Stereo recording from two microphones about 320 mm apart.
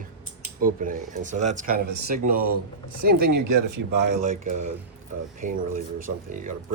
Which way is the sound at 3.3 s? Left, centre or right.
Right.